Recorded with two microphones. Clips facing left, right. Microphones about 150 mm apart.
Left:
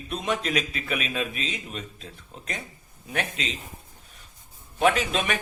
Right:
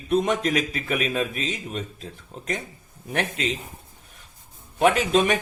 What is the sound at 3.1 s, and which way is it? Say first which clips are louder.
Speech: right 4 dB; 50° right (ahead or behind).